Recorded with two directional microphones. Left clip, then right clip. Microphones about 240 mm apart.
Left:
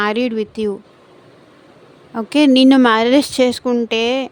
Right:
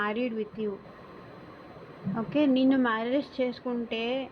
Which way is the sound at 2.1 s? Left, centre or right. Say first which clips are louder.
Left 13 dB; left.